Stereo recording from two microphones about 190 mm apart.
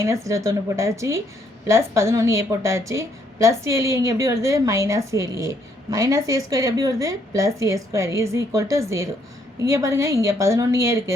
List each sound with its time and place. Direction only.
0.0 s a woman's voice: 15° right (ahead or behind)